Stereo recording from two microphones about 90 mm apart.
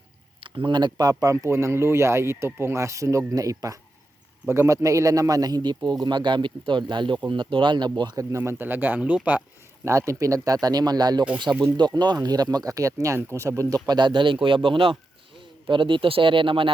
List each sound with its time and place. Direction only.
0.3 s speech: 70° right (ahead or behind); by 8.2 s 50° right (ahead or behind)
8.2 s speech: 35° right (ahead or behind); by 9.4 s 15° right (ahead or behind)
9.8 s speech: 35° right (ahead or behind); by 11.3 s 50° right (ahead or behind)
11.5 s speech: 25° right (ahead or behind)
11.8 s speech: 55° right (ahead or behind); by 16.7 s 75° right (ahead or behind)